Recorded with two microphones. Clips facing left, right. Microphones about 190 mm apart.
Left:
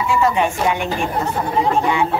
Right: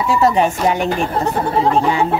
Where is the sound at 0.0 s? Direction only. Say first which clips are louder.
Right 3 dB; 40° right (ahead or behind).